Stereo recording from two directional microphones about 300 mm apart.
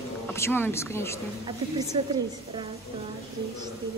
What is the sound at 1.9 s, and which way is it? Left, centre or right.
Speech, centre.